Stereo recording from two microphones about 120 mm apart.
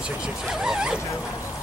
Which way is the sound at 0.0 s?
5° right (ahead or behind).